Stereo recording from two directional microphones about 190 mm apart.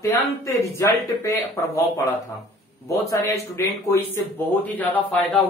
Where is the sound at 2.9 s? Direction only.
15° left (ahead or behind).